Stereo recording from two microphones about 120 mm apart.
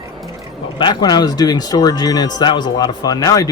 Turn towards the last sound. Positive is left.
turn(degrees=30)  # may be behind; listen again after turning